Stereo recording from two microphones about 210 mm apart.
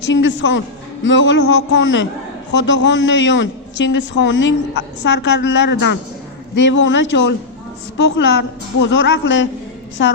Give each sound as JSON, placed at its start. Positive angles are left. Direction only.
{"t": 0.1, "sound": "a woman's voice", "side_deg": 60}